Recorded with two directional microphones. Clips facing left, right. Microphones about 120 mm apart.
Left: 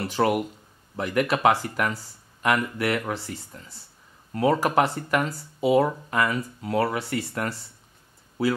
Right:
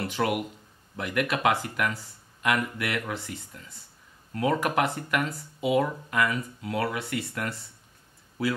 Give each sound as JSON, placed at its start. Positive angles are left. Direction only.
{"t": 0.0, "sound": "speech", "side_deg": 35}